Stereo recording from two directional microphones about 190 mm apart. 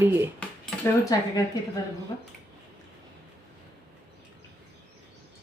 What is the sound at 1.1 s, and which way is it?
Speech, 20° left (ahead or behind).